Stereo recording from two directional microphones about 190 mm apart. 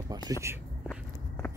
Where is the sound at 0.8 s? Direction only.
5° left (ahead or behind).